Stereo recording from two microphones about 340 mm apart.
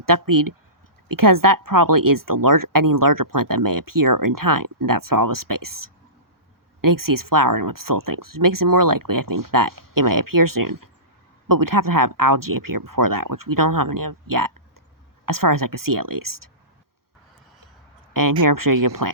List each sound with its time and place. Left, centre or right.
0.0 s speech: right
18.1 s speech: right